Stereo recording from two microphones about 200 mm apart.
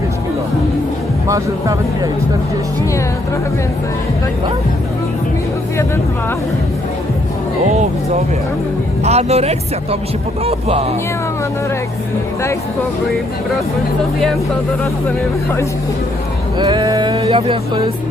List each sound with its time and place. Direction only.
1.3 s speech: 15° right (ahead or behind)
9.0 s speech: 30° right (ahead or behind)
16.6 s speech: 20° right (ahead or behind)